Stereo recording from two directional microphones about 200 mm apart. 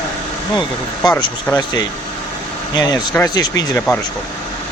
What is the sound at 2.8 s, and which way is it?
Speech, 20° left (ahead or behind).